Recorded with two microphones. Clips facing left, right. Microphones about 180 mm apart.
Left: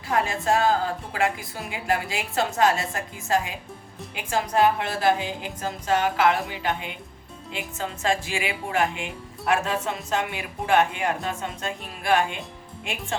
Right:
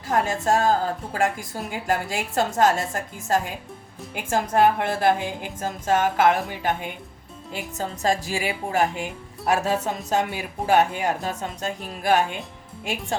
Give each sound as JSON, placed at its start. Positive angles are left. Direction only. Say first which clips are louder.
{"t": 0.1, "sound": "a woman's voice", "louder": "right 2 dB", "side_deg": -45}